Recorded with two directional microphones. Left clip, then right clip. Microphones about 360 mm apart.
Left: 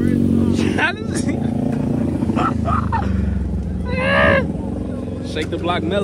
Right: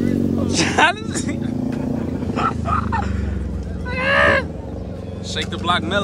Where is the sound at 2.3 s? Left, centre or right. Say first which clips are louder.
Right 1 dB; centre.